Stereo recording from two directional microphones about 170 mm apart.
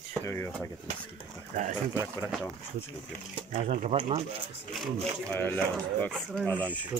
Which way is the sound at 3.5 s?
45° right (ahead or behind).